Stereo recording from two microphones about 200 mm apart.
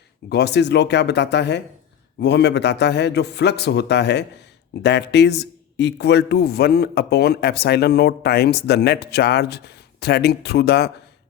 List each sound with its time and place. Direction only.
0.3 s a man's voice: 55° left (ahead or behind)